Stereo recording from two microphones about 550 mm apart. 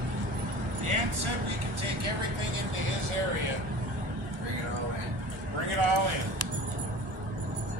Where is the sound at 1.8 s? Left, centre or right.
Right.